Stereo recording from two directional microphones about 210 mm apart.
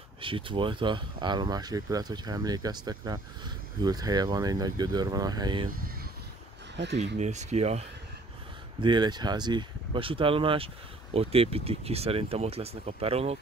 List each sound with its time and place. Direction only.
0.2 s speech: 25° right (ahead or behind)
7.2 s speech: 35° right (ahead or behind)
8.8 s speech: 20° right (ahead or behind)